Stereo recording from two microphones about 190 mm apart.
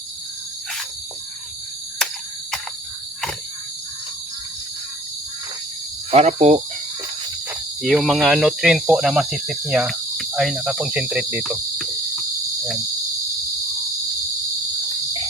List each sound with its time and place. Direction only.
6.1 s speech: 35° right (ahead or behind)
7.8 s speech: centre (ahead or behind)